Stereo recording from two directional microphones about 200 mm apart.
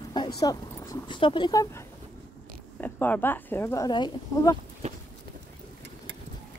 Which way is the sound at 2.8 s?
10° left (ahead or behind).